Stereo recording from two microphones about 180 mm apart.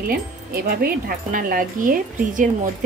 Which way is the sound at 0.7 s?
55° right (ahead or behind).